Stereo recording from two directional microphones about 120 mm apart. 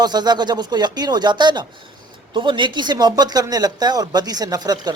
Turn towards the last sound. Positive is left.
turn(degrees=-35)  # may be behind; listen again after turning